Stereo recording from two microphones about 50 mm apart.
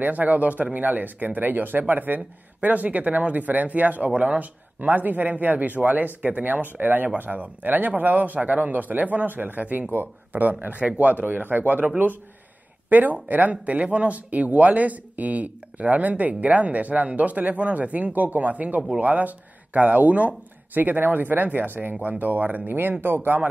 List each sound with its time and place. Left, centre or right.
0.0 s speech: right
10.8 s speech: right
12.9 s speech: right